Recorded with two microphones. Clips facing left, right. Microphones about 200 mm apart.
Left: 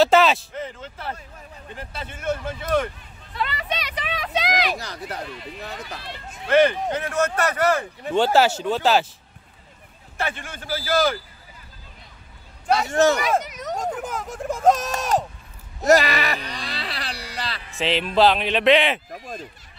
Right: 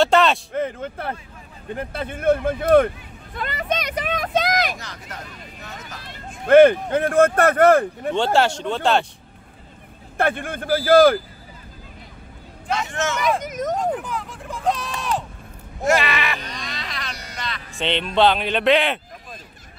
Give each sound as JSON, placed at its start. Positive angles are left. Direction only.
{"t": 0.0, "sound": "a sound", "side_deg": 0}
{"t": 0.6, "sound": "speech", "side_deg": -55}
{"t": 4.7, "sound": "speech", "side_deg": 35}
{"t": 5.9, "sound": "speech", "side_deg": -50}
{"t": 8.1, "sound": "speech", "side_deg": 5}
{"t": 10.1, "sound": "speech", "side_deg": -55}
{"t": 12.6, "sound": "speech", "side_deg": 35}
{"t": 13.4, "sound": "speech", "side_deg": -50}
{"t": 14.0, "sound": "speech", "side_deg": 45}
{"t": 16.5, "sound": "a sound", "side_deg": 35}
{"t": 17.7, "sound": "speech", "side_deg": 0}